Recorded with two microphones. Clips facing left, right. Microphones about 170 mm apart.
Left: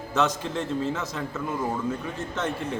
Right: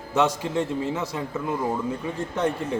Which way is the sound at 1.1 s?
15° right (ahead or behind).